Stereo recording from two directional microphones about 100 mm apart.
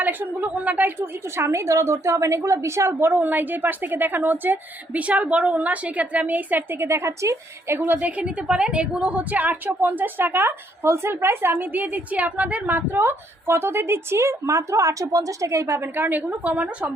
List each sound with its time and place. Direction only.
0.0 s a woman's voice: 20° right (ahead or behind)